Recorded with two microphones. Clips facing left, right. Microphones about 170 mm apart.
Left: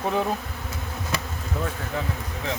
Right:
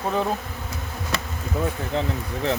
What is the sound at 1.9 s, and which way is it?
Speech, 25° right (ahead or behind).